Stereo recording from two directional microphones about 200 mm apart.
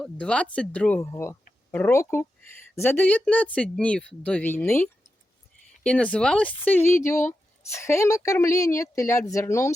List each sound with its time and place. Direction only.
0.0 s a woman's voice: 5° left (ahead or behind)